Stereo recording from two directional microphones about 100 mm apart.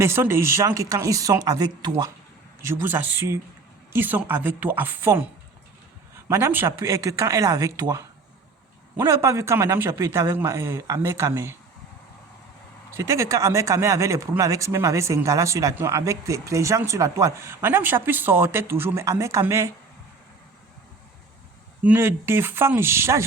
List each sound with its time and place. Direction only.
0.0 s speech: 25° right (ahead or behind); by 2.0 s 40° right (ahead or behind)
2.6 s speech: 20° right (ahead or behind)
6.2 s speech: 25° right (ahead or behind)
13.0 s speech: 30° right (ahead or behind)
21.8 s speech: 25° right (ahead or behind)